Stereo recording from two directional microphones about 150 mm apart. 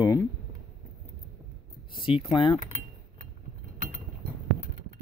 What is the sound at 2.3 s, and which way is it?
Speech, 30° left (ahead or behind).